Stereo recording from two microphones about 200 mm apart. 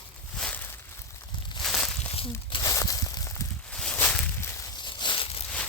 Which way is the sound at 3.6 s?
5° left (ahead or behind).